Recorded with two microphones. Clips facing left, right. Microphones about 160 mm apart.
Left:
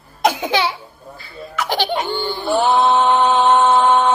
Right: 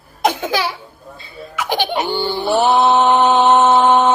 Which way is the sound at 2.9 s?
20° right (ahead or behind).